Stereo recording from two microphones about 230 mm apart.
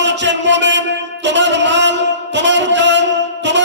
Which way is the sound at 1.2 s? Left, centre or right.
Right.